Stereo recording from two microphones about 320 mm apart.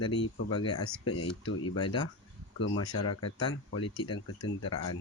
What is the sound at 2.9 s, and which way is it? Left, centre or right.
Speech, left.